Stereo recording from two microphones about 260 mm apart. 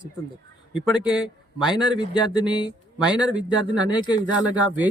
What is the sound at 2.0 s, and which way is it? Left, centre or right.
Speech, centre.